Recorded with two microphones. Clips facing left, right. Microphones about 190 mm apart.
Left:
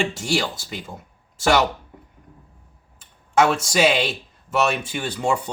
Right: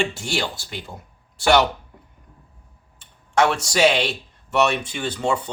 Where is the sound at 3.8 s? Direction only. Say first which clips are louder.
Right 2 dB; 5° left (ahead or behind).